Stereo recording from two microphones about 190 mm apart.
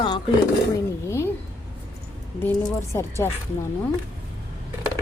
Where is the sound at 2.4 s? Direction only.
10° left (ahead or behind).